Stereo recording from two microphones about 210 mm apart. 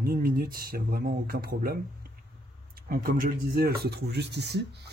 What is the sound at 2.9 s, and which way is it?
Speech, 45° right (ahead or behind).